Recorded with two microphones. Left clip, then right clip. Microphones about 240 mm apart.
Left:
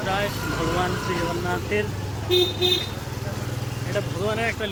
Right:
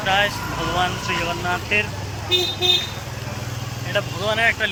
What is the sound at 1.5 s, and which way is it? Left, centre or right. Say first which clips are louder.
Speech: right 7 dB; centre.